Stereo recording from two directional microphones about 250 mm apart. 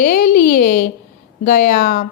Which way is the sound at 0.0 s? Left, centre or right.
Left.